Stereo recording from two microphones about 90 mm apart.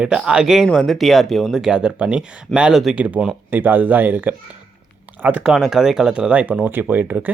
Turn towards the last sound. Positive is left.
turn(degrees=-20)  # may be behind; listen again after turning